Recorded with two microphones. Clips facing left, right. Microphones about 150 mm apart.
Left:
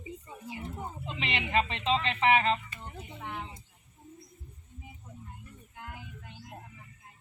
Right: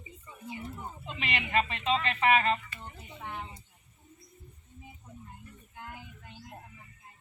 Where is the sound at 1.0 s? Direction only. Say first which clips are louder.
Even; 25° left (ahead or behind).